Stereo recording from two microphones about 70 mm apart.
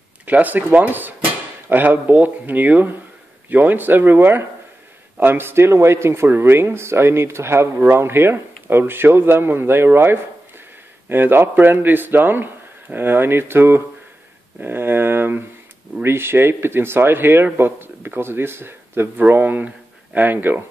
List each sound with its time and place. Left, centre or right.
0.2 s a man's voice: right
11.1 s a man's voice: right